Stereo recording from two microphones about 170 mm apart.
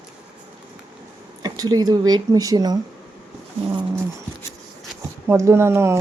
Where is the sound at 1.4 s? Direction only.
20° right (ahead or behind).